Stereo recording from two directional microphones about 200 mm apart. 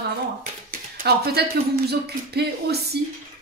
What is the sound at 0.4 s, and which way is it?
Speech, 45° right (ahead or behind).